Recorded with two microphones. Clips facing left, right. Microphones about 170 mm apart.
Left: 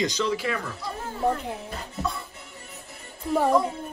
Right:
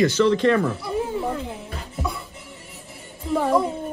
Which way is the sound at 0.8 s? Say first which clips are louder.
Right 4 dB; 15° right (ahead or behind).